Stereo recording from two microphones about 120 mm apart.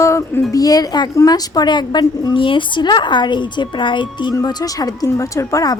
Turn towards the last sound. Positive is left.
turn(degrees=25)  # may be behind; listen again after turning